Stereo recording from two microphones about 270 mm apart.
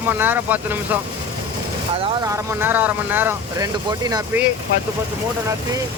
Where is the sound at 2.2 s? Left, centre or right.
Centre.